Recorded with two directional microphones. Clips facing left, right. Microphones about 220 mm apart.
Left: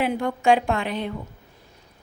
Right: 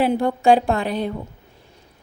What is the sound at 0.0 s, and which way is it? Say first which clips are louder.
A woman's voice: right 4 dB; 35° right (ahead or behind).